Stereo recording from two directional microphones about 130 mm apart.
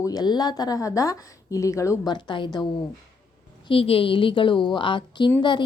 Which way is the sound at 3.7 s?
45° left (ahead or behind).